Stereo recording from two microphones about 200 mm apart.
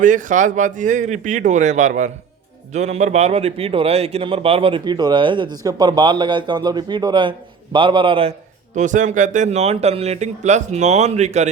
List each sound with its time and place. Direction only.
0.0 s a man's voice: 40° right (ahead or behind)